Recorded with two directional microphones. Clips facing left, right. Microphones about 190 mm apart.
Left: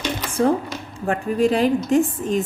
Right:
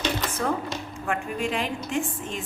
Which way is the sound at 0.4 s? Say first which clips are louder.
Left 12 dB; 30° left (ahead or behind).